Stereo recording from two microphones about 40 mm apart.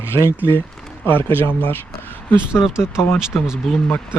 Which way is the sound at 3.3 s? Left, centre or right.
Left.